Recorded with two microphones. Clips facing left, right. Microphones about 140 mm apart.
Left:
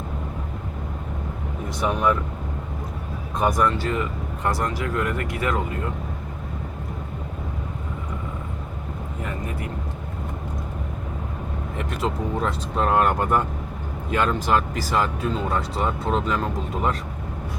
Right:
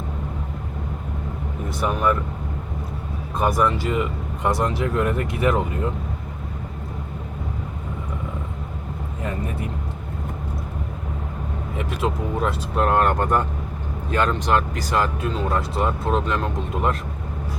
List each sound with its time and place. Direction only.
1.8 s speech: centre (ahead or behind)
3.3 s speech: 5° right (ahead or behind); by 5.6 s 25° right (ahead or behind)
11.9 s speech: 5° right (ahead or behind)